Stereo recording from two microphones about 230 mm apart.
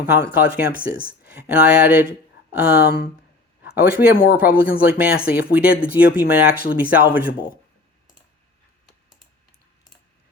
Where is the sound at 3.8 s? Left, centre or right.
Left.